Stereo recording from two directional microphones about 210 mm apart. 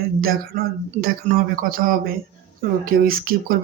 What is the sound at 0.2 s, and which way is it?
Speech, 45° right (ahead or behind).